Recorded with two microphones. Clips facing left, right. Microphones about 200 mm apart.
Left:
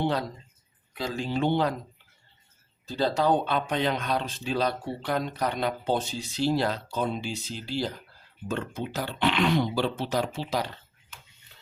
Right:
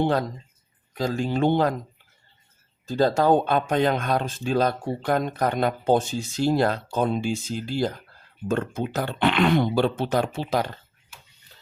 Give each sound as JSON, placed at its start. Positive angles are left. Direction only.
{"t": 0.0, "sound": "speech", "side_deg": -50}
{"t": 2.8, "sound": "speech", "side_deg": -45}